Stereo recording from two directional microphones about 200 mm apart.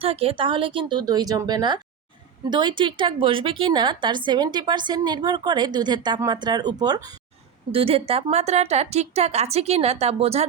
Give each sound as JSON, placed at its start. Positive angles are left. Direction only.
{"t": 0.0, "sound": "a woman's voice", "side_deg": -30}